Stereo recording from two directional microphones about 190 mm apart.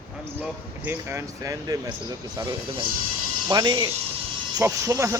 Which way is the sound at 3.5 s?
20° right (ahead or behind).